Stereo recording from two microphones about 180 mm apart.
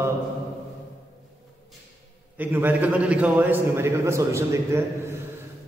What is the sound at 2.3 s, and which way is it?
A man's voice, 10° right (ahead or behind).